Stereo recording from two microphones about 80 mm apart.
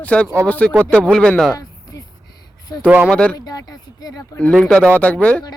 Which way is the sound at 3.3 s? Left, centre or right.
Left.